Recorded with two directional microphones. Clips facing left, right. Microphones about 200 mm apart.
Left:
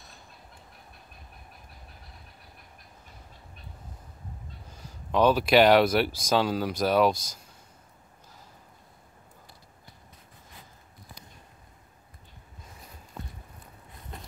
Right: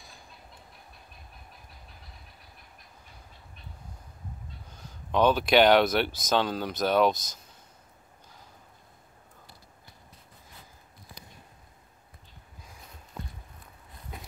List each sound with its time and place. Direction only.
4.6 s speech: 5° left (ahead or behind)